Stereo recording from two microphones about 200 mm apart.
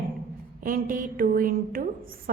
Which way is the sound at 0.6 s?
45° right (ahead or behind).